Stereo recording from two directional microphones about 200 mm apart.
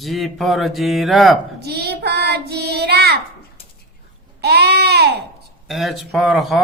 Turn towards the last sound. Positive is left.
turn(degrees=0)  # may be behind; listen again after turning